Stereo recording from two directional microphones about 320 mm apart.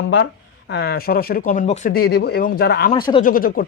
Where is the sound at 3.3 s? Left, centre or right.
Left.